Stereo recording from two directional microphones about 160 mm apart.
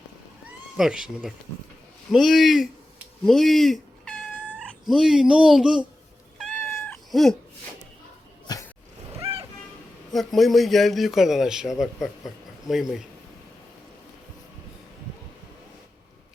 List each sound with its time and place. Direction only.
0.8 s a man's voice: 5° right (ahead or behind)
6.4 s cat: 10° left (ahead or behind)
8.5 s a sound: 25° left (ahead or behind)
10.1 s a man's voice: centre (ahead or behind)